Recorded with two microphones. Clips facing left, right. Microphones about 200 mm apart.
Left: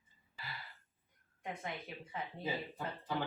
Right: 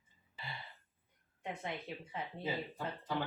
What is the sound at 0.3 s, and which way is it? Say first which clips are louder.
Gasp: right 1 dB; 20° right (ahead or behind).